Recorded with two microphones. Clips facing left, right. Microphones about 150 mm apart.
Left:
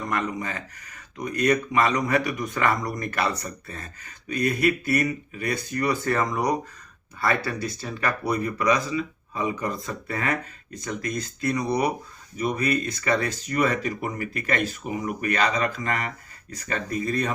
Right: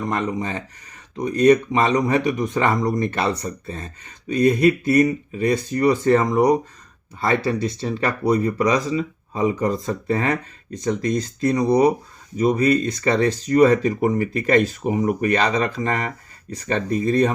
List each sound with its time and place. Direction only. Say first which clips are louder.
0.1 s speech: right 2 dB; 30° right (ahead or behind)